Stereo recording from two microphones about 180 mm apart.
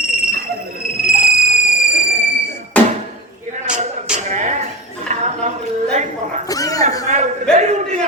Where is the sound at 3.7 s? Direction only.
40° right (ahead or behind).